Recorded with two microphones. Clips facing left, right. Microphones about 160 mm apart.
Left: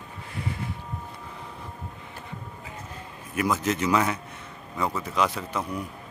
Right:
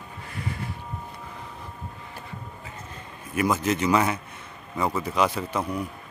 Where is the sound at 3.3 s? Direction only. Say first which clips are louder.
Right 2 dB; centre (ahead or behind).